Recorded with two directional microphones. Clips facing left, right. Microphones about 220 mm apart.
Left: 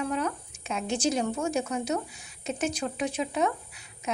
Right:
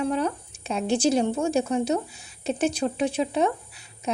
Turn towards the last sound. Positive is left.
turn(degrees=-30)  # may be behind; listen again after turning